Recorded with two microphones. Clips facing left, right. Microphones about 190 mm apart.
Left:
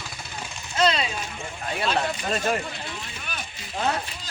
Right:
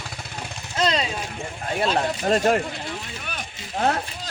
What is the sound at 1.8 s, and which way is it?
Speech, 35° right (ahead or behind).